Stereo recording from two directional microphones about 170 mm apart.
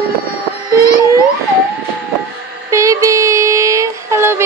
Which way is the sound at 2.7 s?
20° right (ahead or behind).